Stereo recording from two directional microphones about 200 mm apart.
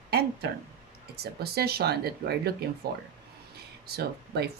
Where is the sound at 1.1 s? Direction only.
50° right (ahead or behind).